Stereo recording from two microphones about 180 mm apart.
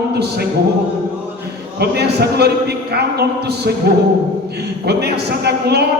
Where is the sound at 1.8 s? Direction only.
65° right (ahead or behind).